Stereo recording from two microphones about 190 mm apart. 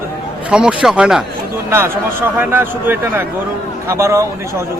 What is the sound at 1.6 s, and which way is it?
A man's voice, 15° right (ahead or behind).